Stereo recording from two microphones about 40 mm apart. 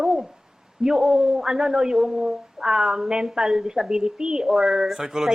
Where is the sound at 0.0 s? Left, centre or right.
Centre.